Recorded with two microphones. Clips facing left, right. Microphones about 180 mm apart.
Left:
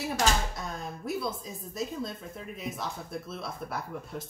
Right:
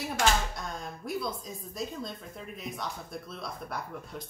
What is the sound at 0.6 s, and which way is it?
A woman's voice, 5° left (ahead or behind).